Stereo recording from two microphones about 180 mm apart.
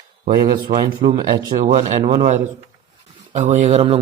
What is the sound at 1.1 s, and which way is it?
Speech, 20° right (ahead or behind).